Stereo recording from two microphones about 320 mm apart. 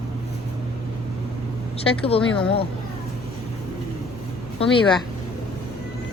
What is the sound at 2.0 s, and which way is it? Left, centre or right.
Speech, centre.